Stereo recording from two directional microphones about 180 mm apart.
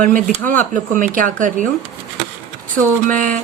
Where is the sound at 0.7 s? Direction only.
50° right (ahead or behind).